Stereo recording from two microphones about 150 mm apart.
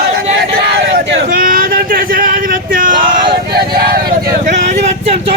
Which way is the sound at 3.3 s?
90° right.